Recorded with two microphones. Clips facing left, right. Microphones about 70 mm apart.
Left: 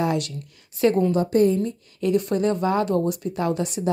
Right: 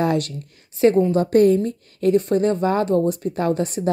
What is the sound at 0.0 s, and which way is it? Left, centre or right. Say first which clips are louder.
A woman's voice: right 3 dB; right.